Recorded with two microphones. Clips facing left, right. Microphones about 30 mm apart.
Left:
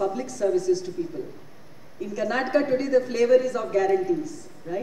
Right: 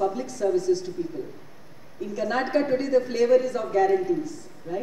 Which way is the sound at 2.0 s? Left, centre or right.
Centre.